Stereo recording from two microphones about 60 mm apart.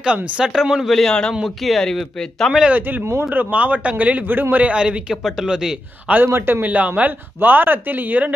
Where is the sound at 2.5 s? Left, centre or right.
Centre.